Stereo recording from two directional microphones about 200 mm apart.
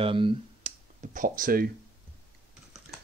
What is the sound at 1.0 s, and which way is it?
Speech, 40° right (ahead or behind).